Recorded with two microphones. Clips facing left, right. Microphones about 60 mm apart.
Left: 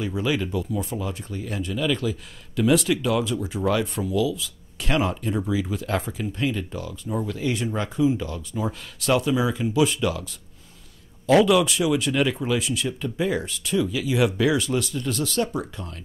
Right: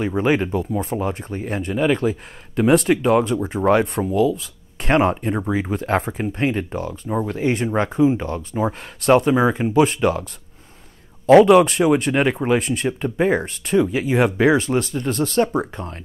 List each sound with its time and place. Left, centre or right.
0.0 s speech: right
11.4 s speech: right